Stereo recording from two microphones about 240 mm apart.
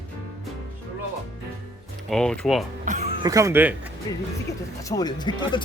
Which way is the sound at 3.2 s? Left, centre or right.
Centre.